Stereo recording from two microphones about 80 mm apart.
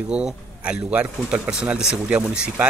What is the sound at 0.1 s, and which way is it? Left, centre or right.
Speech, centre.